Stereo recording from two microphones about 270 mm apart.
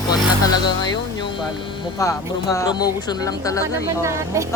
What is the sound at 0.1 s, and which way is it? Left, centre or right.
Speech, centre.